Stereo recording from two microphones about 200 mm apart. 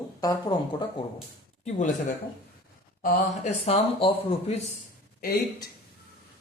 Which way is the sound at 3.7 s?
30° left (ahead or behind).